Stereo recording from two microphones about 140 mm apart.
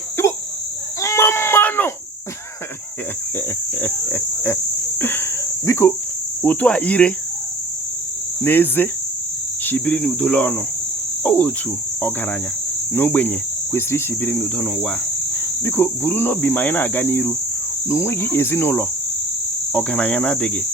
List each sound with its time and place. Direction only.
1.0 s baby cry: 20° left (ahead or behind)
3.8 s cricket: 15° left (ahead or behind)
4.9 s insect: 15° left (ahead or behind)
6.4 s cricket: 10° left (ahead or behind)
8.4 s cricket: 15° left (ahead or behind)
12.9 s cricket: 15° left (ahead or behind)